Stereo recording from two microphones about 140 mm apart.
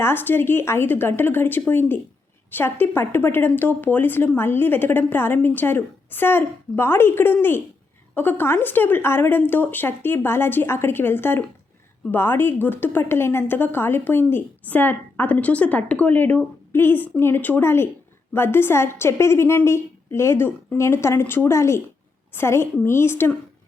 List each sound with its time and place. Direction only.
0.0 s a woman's voice: 15° left (ahead or behind)